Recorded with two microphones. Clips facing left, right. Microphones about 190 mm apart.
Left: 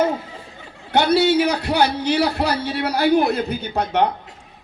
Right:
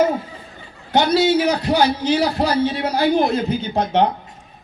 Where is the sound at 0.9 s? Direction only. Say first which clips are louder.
Even; 60° left (ahead or behind).